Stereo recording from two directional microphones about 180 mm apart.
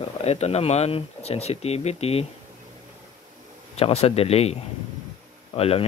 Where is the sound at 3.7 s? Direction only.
35° left (ahead or behind).